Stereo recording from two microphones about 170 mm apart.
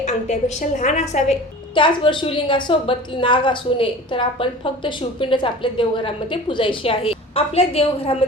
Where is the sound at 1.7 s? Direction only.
30° left (ahead or behind).